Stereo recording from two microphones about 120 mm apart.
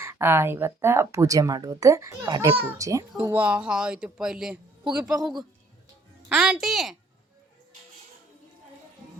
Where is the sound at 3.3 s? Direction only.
10° right (ahead or behind).